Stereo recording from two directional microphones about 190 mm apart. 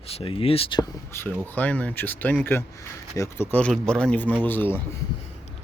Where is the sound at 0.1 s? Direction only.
30° left (ahead or behind).